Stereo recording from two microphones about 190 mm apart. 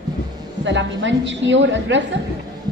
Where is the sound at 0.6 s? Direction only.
70° right (ahead or behind).